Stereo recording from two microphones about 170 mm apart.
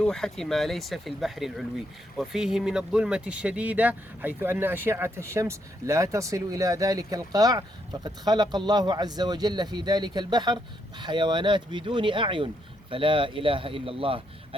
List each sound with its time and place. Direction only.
0.0 s speech: 5° left (ahead or behind); by 14.2 s 30° right (ahead or behind)